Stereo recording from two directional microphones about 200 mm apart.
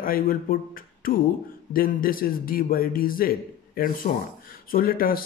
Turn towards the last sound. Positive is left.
turn(degrees=45)  # may be behind; listen again after turning